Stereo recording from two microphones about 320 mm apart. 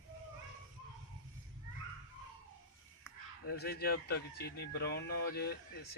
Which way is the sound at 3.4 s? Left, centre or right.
Left.